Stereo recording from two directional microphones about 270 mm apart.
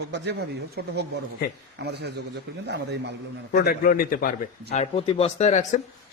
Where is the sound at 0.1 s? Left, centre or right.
Right.